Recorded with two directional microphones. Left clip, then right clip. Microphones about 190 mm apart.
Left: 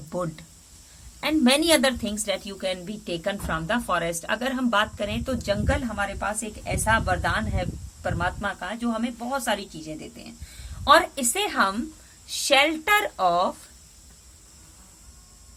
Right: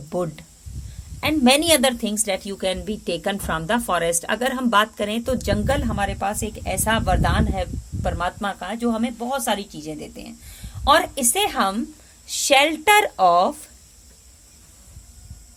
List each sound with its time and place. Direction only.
0.1 s a woman's voice: 25° right (ahead or behind)